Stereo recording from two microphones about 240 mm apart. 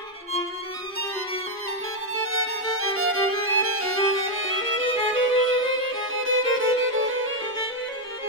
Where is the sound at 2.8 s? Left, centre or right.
Right.